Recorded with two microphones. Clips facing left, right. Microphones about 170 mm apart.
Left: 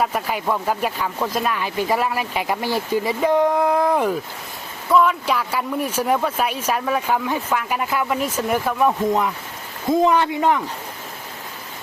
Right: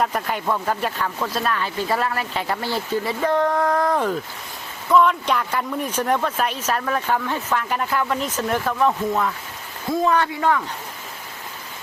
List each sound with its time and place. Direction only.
0.0 s a man's voice: 5° left (ahead or behind)